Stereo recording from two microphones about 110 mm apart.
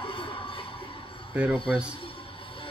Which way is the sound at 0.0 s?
55° left (ahead or behind).